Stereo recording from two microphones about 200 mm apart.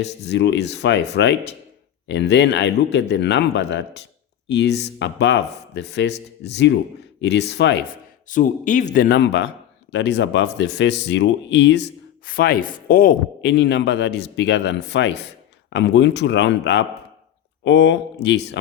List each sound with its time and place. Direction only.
0.0 s speech: 60° left (ahead or behind)
8.3 s speech: 40° left (ahead or behind)
9.0 s speech: 55° left (ahead or behind)